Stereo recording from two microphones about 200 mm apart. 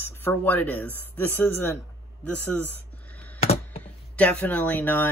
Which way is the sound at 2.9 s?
5° left (ahead or behind).